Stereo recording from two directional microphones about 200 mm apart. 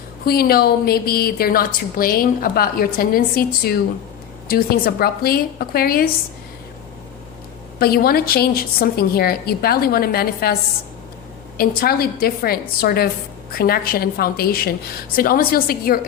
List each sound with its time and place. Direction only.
0.3 s a woman's voice: 50° left (ahead or behind)
7.8 s a woman's voice: 50° left (ahead or behind)
11.5 s a woman's voice: 50° left (ahead or behind)